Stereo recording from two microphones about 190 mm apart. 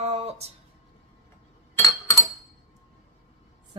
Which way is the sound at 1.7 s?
15° left (ahead or behind).